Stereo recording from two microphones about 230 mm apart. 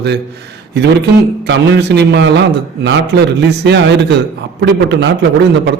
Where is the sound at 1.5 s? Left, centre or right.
Right.